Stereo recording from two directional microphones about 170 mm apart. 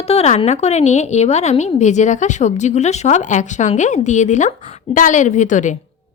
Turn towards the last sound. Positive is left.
turn(degrees=45)  # may be behind; listen again after turning